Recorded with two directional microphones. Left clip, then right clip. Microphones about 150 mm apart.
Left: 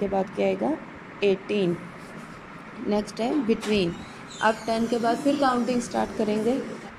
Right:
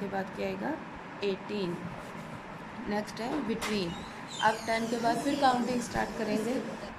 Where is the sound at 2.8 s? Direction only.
15° left (ahead or behind).